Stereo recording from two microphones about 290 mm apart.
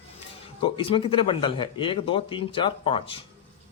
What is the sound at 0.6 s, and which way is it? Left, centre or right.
A man's voice, centre.